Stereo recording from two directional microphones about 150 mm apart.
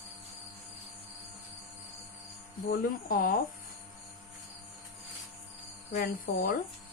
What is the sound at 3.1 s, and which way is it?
Speech, 80° left.